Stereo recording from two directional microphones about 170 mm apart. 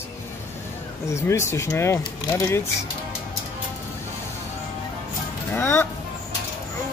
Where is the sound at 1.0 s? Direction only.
15° left (ahead or behind).